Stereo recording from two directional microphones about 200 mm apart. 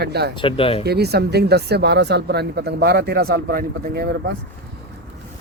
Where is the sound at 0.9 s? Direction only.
55° right (ahead or behind).